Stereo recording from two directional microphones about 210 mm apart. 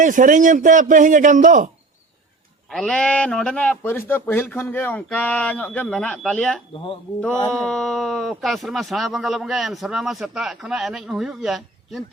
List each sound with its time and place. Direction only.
0.0 s a man's voice: 40° right (ahead or behind)
2.6 s speech: 5° left (ahead or behind)